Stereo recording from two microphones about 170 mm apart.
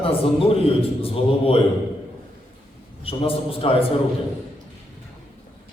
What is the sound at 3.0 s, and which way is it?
Speech, 35° left (ahead or behind).